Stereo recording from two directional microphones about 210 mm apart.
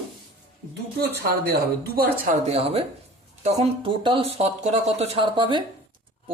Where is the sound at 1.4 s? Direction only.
45° right (ahead or behind).